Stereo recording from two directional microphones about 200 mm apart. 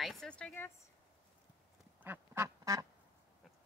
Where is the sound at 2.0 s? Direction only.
10° right (ahead or behind).